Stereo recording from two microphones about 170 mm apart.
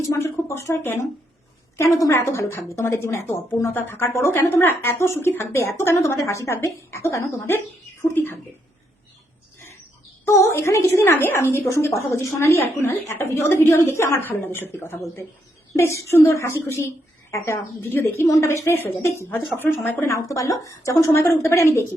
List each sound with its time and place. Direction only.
0.0 s a woman's voice: 20° left (ahead or behind)
10.2 s a woman's voice: 15° left (ahead or behind)